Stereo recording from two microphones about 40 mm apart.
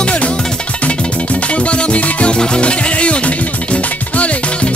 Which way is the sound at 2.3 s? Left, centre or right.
Left.